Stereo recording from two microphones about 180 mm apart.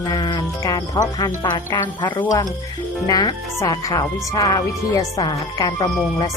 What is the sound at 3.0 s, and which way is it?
Speech, 20° left (ahead or behind).